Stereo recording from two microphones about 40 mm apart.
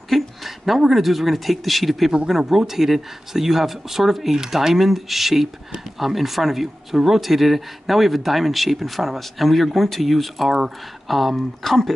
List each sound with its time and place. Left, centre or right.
0.1 s speech: centre